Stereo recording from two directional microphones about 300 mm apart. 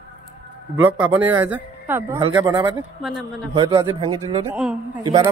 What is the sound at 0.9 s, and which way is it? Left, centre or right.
Speech, centre.